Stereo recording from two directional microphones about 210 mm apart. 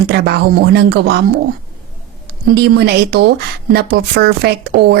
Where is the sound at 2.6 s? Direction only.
50° right (ahead or behind).